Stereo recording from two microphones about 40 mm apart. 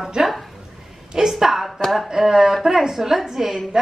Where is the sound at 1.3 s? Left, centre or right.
Centre.